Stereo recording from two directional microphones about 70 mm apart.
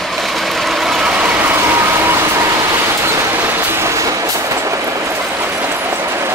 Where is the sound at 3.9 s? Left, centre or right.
Right.